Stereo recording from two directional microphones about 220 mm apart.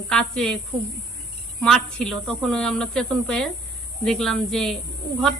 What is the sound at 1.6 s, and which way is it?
A woman's voice, 5° left (ahead or behind).